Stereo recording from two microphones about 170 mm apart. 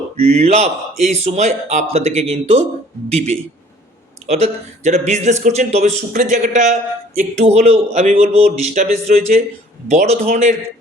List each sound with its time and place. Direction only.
0.2 s speech: 40° right (ahead or behind)